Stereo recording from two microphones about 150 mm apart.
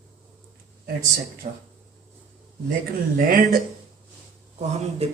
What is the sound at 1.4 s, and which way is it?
Speech, 60° right (ahead or behind).